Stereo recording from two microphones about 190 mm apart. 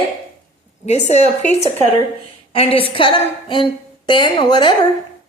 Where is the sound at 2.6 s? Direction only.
30° left (ahead or behind).